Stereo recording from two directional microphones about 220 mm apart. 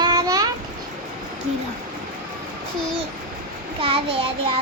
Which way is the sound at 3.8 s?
25° right (ahead or behind).